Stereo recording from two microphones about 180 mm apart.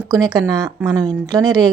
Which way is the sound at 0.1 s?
20° right (ahead or behind).